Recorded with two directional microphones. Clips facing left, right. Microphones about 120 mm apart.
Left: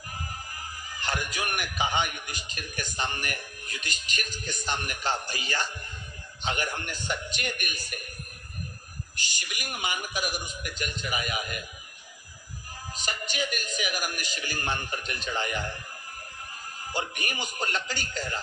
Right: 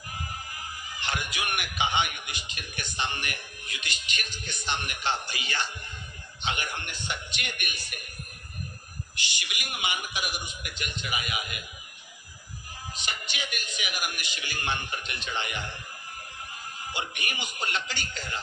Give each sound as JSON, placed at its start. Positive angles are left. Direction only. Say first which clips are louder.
{"t": 0.5, "sound": "a man's voice", "louder": "even", "side_deg": 40}
{"t": 9.1, "sound": "a man's voice", "louder": "right 1 dB", "side_deg": 40}
{"t": 12.9, "sound": "a man's voice", "louder": "left 3 dB", "side_deg": 40}
{"t": 16.9, "sound": "a man's voice", "louder": "left 3 dB", "side_deg": 40}